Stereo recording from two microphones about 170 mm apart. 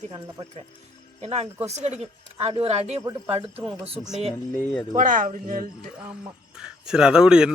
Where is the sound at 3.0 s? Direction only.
20° right (ahead or behind).